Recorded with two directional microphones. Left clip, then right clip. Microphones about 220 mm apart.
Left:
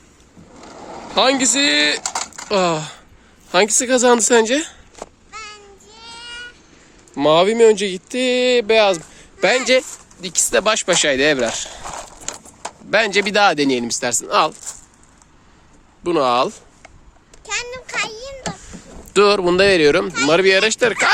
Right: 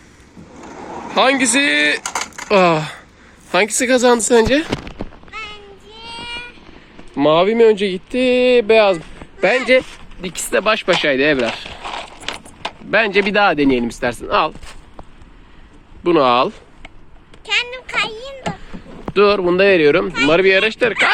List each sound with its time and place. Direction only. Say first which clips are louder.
0.6 s vehicle: right 4 dB; 5° left (ahead or behind)
3.5 s speech: right 1 dB; 10° left (ahead or behind)
5.3 s child singing: right 6 dB; 10° left (ahead or behind)
7.2 s speech: right 1 dB; 15° left (ahead or behind)
16.0 s speech: right 3 dB; 10° left (ahead or behind)
17.4 s a sound: right 6 dB; 30° left (ahead or behind)
19.1 s speech: even; 45° left (ahead or behind); by 21.1 s 20° left (ahead or behind)